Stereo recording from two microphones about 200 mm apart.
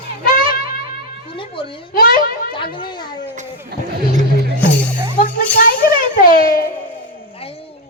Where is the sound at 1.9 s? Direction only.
45° left (ahead or behind).